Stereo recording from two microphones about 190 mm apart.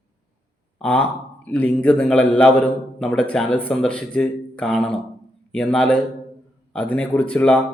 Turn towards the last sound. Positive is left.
turn(degrees=5)  # may be behind; listen again after turning